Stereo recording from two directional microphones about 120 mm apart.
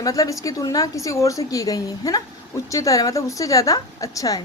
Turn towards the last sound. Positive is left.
turn(degrees=30)  # may be behind; listen again after turning